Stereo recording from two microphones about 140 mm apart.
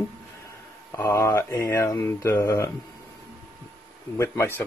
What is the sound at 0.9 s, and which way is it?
Speech, 20° left (ahead or behind).